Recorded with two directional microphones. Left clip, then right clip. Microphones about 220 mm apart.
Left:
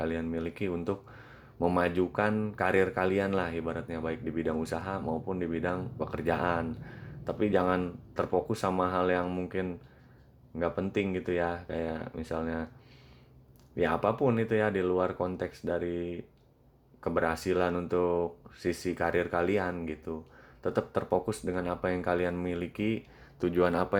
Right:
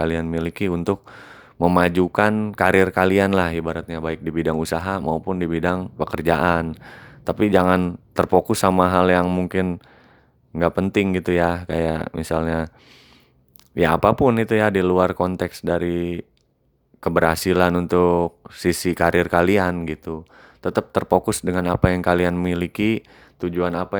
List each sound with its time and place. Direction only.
0.0 s speech: 45° right (ahead or behind)
13.7 s speech: 45° right (ahead or behind)
23.4 s speech: 30° right (ahead or behind)